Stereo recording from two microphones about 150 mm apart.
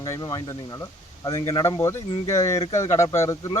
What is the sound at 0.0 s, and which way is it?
Speech, 25° left (ahead or behind).